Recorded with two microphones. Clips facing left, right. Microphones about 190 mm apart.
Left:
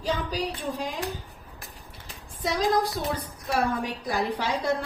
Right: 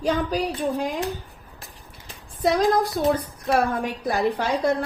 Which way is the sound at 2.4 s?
55° right (ahead or behind).